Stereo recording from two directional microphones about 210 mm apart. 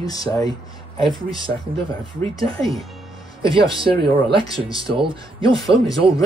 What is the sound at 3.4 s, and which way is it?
Speech, 25° right (ahead or behind).